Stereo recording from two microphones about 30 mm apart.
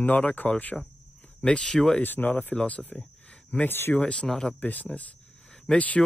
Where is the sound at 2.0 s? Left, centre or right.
Left.